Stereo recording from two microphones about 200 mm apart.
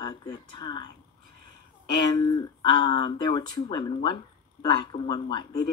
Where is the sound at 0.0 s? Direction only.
20° left (ahead or behind).